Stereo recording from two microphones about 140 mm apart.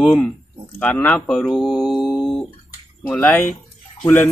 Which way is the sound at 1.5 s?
Centre (ahead or behind).